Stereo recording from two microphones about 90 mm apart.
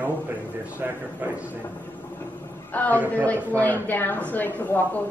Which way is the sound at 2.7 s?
20° left (ahead or behind).